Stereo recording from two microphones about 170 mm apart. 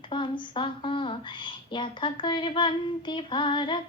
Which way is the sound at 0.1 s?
30° left (ahead or behind).